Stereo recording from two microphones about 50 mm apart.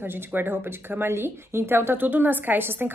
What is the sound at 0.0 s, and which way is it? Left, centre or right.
Speech, right.